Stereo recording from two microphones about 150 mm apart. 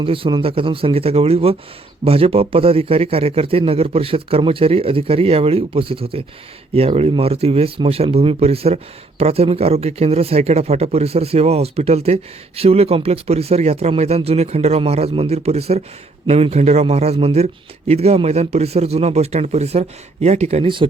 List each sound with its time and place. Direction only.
0.0 s a man's voice: 35° right (ahead or behind)